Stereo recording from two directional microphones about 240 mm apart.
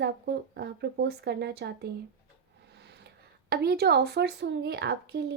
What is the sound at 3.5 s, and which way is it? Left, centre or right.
Speech, right.